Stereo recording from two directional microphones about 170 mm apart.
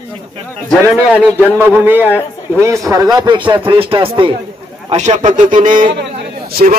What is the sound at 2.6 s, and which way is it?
Speech, 20° right (ahead or behind).